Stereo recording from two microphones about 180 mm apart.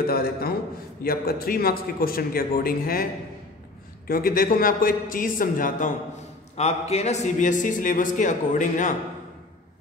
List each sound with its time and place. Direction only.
0.0 s a man's voice: 55° left (ahead or behind)
4.1 s a man's voice: 55° left (ahead or behind)
6.5 s a man's voice: 35° left (ahead or behind)